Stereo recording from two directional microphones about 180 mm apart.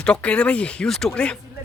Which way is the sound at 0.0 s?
5° left (ahead or behind).